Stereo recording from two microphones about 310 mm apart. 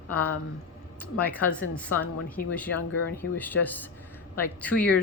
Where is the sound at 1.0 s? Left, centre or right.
Centre.